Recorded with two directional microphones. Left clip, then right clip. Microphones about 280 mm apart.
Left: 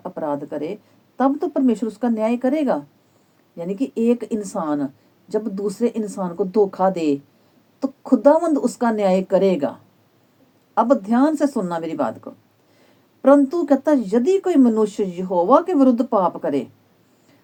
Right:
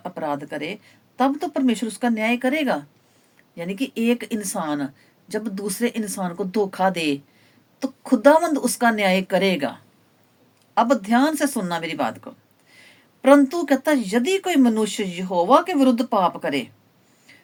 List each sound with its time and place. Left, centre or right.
0.5 s a woman's voice: centre
10.8 s speech: centre